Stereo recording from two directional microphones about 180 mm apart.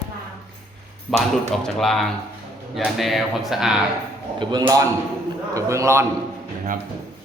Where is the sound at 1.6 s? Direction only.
Centre (ahead or behind).